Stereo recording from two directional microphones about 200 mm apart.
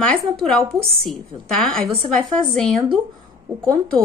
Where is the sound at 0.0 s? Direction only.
5° left (ahead or behind).